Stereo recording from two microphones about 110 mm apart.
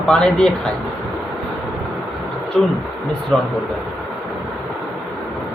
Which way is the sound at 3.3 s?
Centre (ahead or behind).